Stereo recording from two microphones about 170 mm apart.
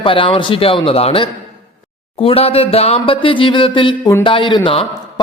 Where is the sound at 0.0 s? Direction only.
30° left (ahead or behind).